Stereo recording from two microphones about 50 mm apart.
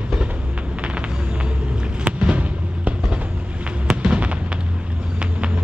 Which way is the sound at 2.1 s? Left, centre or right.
Right.